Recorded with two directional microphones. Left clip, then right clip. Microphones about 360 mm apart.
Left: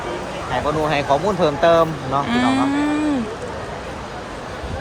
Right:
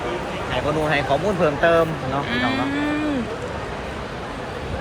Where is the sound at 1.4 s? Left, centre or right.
Left.